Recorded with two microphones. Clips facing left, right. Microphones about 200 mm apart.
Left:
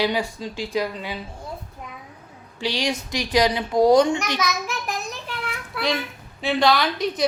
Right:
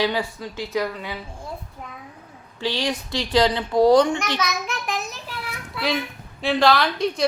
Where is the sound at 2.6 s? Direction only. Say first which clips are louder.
Even; 15° left (ahead or behind).